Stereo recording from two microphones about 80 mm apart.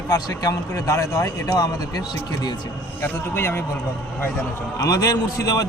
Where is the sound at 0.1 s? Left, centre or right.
Left.